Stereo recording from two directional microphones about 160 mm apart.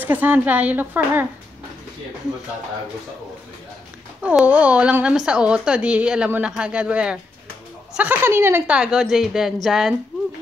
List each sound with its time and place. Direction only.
0.0 s speech: 10° right (ahead or behind)
4.2 s a woman's voice: 10° right (ahead or behind)